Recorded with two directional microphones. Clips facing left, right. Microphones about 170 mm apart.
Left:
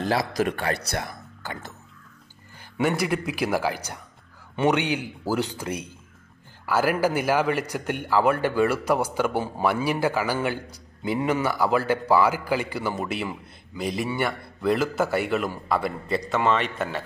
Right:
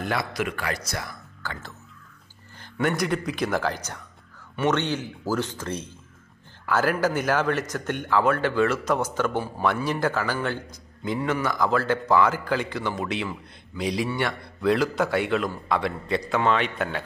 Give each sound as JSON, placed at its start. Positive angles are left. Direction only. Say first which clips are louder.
{"t": 0.0, "sound": "speech", "louder": "left 4 dB", "side_deg": 35}
{"t": 0.9, "sound": "speech", "louder": "left 3 dB", "side_deg": 20}
{"t": 2.6, "sound": "a man's voice", "louder": "left 1 dB", "side_deg": 10}